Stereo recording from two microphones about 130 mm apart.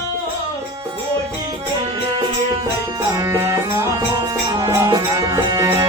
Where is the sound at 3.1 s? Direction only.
25° right (ahead or behind).